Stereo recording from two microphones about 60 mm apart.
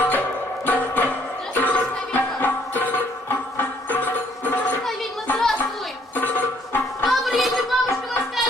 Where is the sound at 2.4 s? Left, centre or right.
Left.